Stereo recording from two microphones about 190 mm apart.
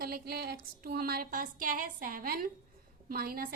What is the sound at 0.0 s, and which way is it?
A woman's voice, 55° right (ahead or behind).